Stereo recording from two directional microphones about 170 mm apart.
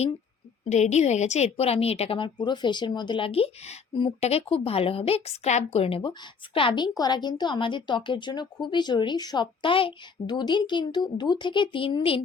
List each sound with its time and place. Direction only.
0.7 s a woman's voice: 40° left (ahead or behind)